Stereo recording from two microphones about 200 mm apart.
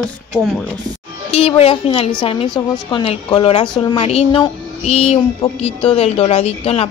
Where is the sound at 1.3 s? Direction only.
30° left (ahead or behind).